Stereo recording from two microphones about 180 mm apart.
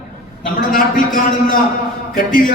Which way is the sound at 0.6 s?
50° left (ahead or behind).